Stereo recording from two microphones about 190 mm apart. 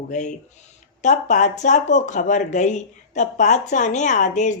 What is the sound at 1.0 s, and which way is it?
Speech, 40° left (ahead or behind).